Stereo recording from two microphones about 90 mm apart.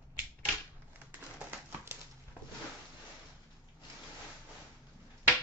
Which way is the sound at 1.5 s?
25° right (ahead or behind).